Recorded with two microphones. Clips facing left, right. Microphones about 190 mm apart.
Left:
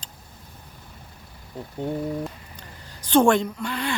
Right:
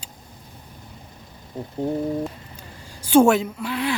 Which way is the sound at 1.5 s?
20° right (ahead or behind).